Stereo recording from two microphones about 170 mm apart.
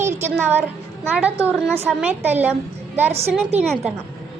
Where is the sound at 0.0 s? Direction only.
15° right (ahead or behind).